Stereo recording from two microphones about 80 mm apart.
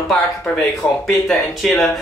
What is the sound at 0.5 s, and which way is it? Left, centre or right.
Speech, centre.